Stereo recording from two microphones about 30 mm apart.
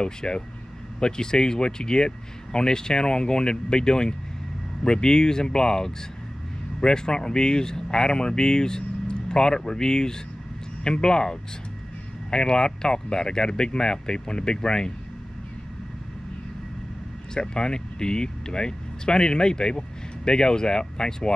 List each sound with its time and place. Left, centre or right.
0.0 s speech: left
17.3 s speech: left